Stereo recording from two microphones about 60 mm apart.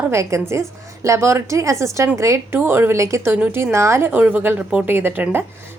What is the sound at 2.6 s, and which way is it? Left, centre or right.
A woman's voice, right.